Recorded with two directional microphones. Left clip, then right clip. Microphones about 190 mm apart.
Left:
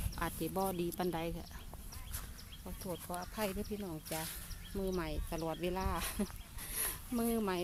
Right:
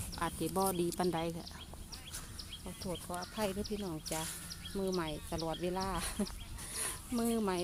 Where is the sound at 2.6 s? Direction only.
5° left (ahead or behind).